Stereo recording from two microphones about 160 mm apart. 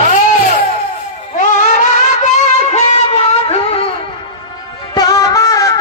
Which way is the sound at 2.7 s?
40° left (ahead or behind).